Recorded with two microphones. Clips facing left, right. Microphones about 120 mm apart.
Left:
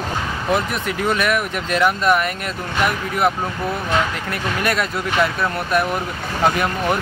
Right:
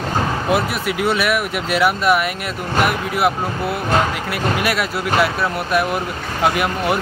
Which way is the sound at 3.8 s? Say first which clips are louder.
Right 4 dB; 40° right (ahead or behind).